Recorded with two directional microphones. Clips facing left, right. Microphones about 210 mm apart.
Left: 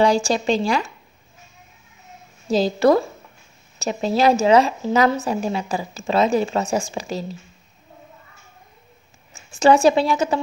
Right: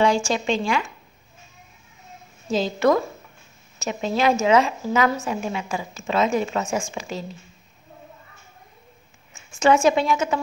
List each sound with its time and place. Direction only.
0.0 s a woman's voice: 35° left (ahead or behind)
2.5 s a woman's voice: 35° left (ahead or behind)
9.3 s a woman's voice: 35° left (ahead or behind)